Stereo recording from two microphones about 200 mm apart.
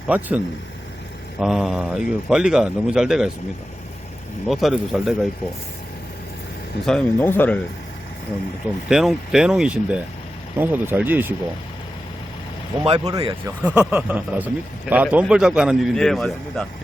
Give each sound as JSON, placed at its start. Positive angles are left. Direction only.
{"t": 0.1, "sound": "speech", "side_deg": -10}
{"t": 4.4, "sound": "speech", "side_deg": 0}
{"t": 6.8, "sound": "speech", "side_deg": 5}
{"t": 8.9, "sound": "speech", "side_deg": 0}
{"t": 12.8, "sound": "speech", "side_deg": -25}
{"t": 13.6, "sound": "speech", "side_deg": -5}